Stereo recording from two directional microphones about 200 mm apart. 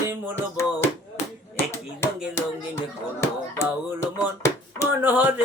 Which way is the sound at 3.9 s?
10° right (ahead or behind).